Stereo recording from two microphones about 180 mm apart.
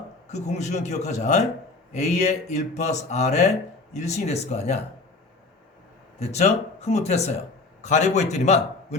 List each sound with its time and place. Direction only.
0.3 s a man's voice: 40° left (ahead or behind)
6.1 s a man's voice: 40° left (ahead or behind)